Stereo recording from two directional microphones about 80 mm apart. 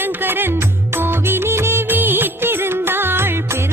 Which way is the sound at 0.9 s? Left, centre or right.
Right.